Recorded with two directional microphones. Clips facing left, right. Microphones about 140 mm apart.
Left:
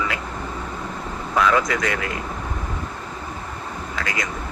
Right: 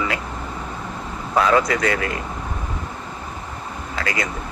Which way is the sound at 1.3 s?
35° right (ahead or behind).